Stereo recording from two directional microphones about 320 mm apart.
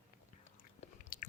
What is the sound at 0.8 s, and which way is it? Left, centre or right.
Chewing, left.